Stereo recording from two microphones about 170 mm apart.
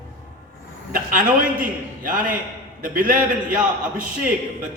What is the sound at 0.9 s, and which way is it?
A man's voice, 50° right (ahead or behind).